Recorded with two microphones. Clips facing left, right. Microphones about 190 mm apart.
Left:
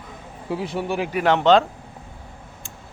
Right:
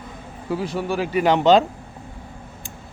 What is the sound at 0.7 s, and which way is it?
Speech, 20° left (ahead or behind).